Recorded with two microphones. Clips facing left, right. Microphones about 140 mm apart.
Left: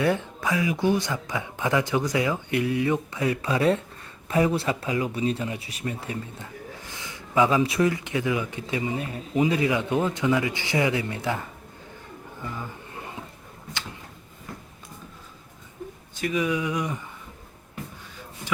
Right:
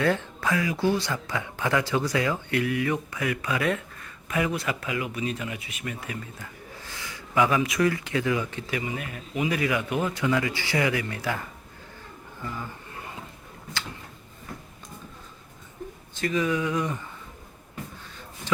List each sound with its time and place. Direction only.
0.0 s speech: 15° left (ahead or behind)
6.8 s speech: 20° left (ahead or behind)
12.4 s speech: 15° left (ahead or behind)
16.1 s speech: 15° left (ahead or behind)